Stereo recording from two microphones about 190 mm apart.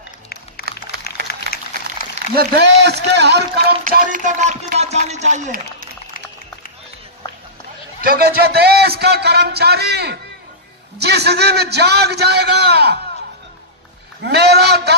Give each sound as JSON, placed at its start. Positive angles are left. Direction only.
{"t": 1.2, "sound": "applause", "side_deg": 50}
{"t": 2.3, "sound": "speech", "side_deg": -60}
{"t": 8.0, "sound": "a man's voice", "side_deg": -50}
{"t": 14.2, "sound": "a man's voice", "side_deg": -60}